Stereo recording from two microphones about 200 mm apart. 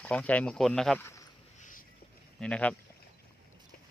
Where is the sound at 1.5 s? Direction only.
40° left (ahead or behind).